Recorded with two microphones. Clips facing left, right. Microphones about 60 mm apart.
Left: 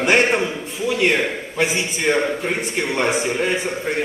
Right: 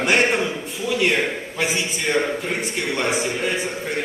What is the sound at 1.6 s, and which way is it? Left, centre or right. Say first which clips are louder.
A man's voice: left 3 dB; left.